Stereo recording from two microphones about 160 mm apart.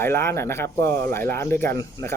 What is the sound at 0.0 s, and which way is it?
Speech, 15° left (ahead or behind).